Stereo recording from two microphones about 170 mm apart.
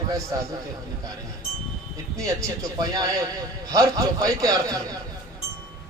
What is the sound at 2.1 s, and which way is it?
A man's voice, 20° right (ahead or behind).